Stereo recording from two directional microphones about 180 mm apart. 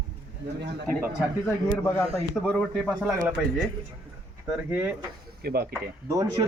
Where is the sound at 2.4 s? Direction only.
5° left (ahead or behind).